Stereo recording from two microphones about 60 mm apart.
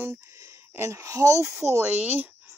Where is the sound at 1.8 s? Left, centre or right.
Right.